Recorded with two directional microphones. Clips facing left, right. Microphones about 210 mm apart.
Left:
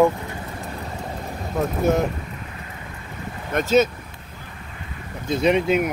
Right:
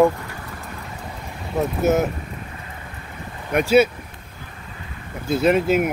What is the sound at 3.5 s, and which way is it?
Speech, 10° right (ahead or behind).